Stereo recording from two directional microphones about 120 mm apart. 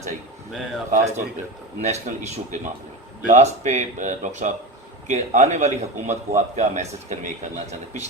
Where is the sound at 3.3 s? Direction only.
75° right (ahead or behind); by 4.5 s 90° right.